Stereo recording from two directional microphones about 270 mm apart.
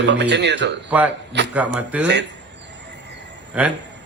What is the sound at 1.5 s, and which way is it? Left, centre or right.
Speech, centre.